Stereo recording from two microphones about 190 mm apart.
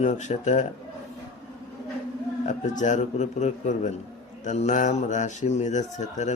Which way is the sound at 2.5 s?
40° left (ahead or behind).